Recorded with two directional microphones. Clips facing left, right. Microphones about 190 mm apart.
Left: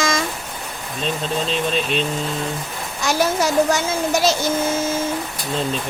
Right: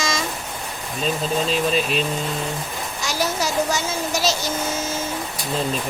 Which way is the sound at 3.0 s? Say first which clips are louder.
Left 5 dB; 55° left (ahead or behind).